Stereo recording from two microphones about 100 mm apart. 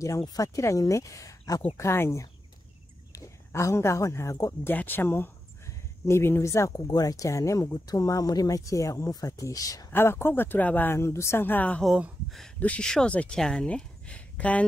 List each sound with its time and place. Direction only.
0.2 s speech: 40° left (ahead or behind)
4.7 s speech: 20° left (ahead or behind); by 9.8 s 35° left (ahead or behind)
9.8 s speech: 25° left (ahead or behind)